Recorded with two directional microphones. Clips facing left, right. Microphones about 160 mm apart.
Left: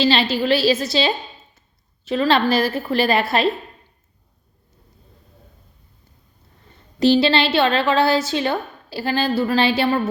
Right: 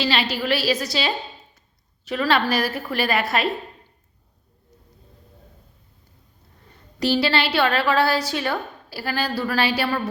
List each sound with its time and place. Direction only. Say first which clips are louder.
0.0 s a woman's voice: left 5 dB; 25° left (ahead or behind)
7.0 s a woman's voice: left 5 dB; 25° left (ahead or behind)